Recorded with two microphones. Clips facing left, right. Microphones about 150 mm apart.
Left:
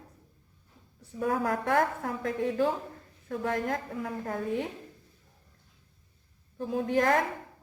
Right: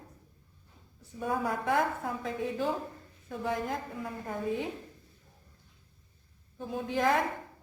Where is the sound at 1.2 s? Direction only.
60° left (ahead or behind).